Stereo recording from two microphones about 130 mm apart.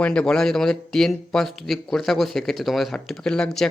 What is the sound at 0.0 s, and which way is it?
Speech, 10° left (ahead or behind).